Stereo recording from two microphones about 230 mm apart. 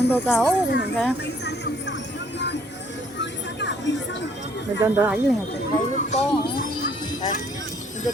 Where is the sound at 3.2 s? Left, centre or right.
Left.